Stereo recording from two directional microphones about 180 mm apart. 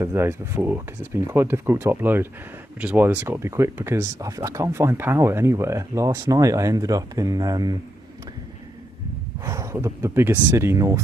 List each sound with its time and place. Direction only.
0.0 s speech: 15° right (ahead or behind)
9.4 s speech: 15° right (ahead or behind)